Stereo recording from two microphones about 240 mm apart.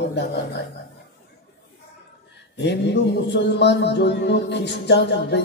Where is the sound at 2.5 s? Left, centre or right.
Left.